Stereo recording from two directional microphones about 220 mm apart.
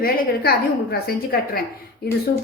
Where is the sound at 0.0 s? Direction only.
45° left (ahead or behind).